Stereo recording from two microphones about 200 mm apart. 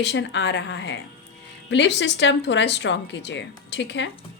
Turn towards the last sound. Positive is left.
turn(degrees=60)  # may be behind; listen again after turning